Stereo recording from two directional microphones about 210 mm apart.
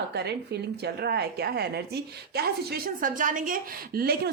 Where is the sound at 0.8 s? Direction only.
50° right (ahead or behind).